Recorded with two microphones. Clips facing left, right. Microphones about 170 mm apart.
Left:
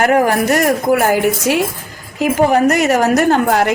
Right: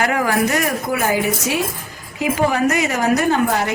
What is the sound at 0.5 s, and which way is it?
A woman's voice, 70° left (ahead or behind).